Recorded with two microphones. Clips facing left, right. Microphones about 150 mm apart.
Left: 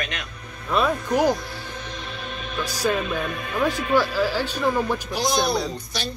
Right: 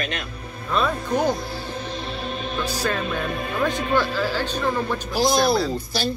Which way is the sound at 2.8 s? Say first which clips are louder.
Left 4 dB; 10° left (ahead or behind).